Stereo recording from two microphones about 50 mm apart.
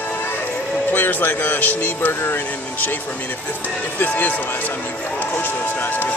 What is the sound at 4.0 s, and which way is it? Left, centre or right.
Speech, left.